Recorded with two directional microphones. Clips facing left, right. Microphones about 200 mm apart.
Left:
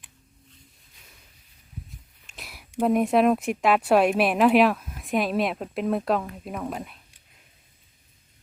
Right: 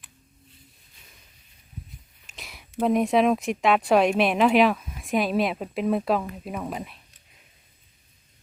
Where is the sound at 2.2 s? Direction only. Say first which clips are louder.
Even; centre (ahead or behind).